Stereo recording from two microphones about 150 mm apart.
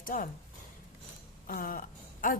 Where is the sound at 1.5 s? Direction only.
70° left (ahead or behind).